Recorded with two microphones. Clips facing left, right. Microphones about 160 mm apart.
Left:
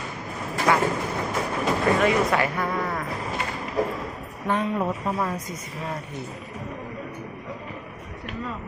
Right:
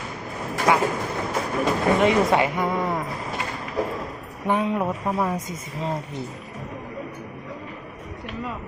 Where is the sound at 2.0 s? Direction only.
25° right (ahead or behind).